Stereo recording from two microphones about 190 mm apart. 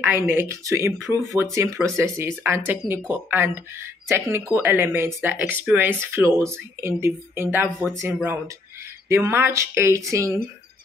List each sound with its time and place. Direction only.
0.0 s speech: 10° right (ahead or behind)